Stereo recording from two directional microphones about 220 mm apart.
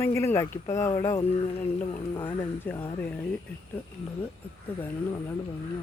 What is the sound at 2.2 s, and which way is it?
Speech, 10° left (ahead or behind).